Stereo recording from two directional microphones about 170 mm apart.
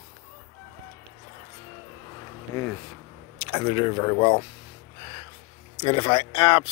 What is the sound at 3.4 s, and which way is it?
Speech, 35° left (ahead or behind).